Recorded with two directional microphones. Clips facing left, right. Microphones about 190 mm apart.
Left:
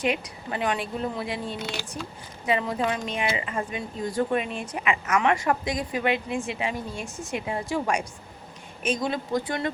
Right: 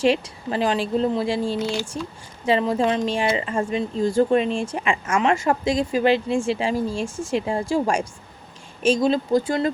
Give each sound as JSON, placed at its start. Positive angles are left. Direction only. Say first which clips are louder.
{"t": 0.0, "sound": "speech", "louder": "right 7 dB", "side_deg": -30}